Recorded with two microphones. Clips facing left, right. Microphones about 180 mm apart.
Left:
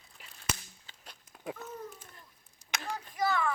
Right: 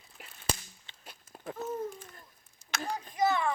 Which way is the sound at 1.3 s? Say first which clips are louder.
Left 1 dB; 30° right (ahead or behind).